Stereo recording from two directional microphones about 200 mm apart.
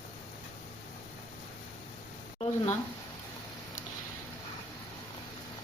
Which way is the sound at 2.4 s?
35° left (ahead or behind).